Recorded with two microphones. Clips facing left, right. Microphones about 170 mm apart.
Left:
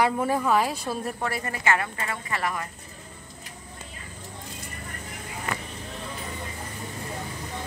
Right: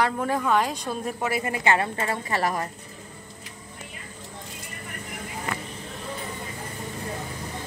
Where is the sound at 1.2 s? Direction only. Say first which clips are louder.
Right 3 dB; 10° right (ahead or behind).